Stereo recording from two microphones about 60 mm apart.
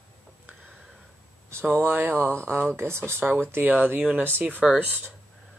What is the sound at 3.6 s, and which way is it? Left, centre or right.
Speech, right.